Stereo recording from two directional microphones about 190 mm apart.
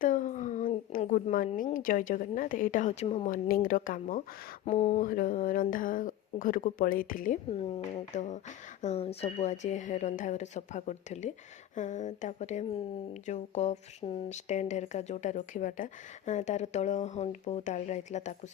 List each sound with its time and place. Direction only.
0.0 s a sound: 40° left (ahead or behind)
1.5 s speech: 45° left (ahead or behind)
3.5 s speech: 45° left (ahead or behind)
4.6 s speech: 35° left (ahead or behind)
7.5 s speech: 30° left (ahead or behind)